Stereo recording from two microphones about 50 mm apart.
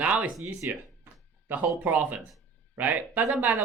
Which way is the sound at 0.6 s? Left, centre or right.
Right.